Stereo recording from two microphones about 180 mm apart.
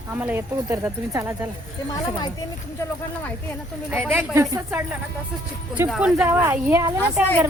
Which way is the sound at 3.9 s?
10° right (ahead or behind).